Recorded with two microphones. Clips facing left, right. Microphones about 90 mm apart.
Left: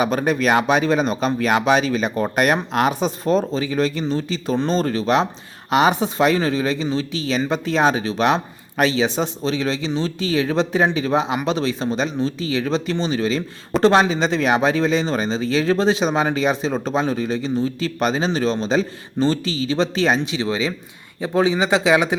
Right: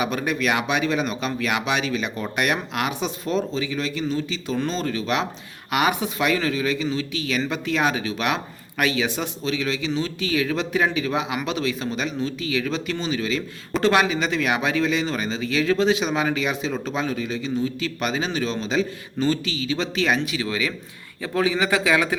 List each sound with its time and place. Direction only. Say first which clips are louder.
0.0 s a man's voice: left 5 dB; 35° left (ahead or behind); by 22.1 s 20° left (ahead or behind)